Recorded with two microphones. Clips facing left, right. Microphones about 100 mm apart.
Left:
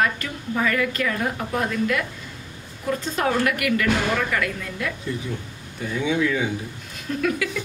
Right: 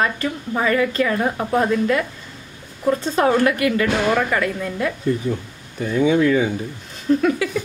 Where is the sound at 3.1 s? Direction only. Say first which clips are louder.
Right 5 dB; 30° right (ahead or behind).